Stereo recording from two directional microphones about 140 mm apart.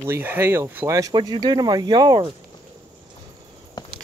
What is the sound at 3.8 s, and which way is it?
Walk, 30° left (ahead or behind).